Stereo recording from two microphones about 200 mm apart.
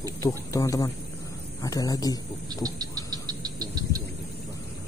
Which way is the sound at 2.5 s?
20° right (ahead or behind).